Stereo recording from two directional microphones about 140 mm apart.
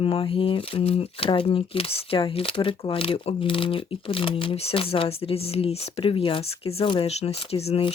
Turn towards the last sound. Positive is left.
turn(degrees=45)  # may be behind; listen again after turning